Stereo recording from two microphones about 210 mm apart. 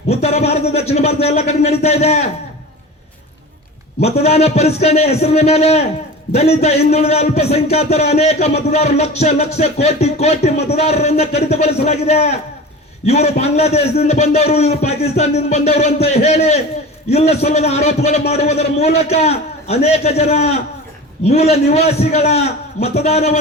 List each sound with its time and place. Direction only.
0.1 s speech: 30° left (ahead or behind)
4.0 s a man's voice: 30° left (ahead or behind)